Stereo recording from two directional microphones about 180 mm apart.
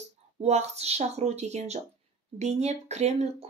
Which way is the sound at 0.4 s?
35° right (ahead or behind).